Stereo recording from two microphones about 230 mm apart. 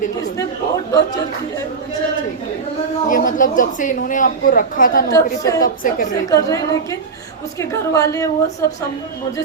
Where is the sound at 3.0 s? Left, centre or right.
Left.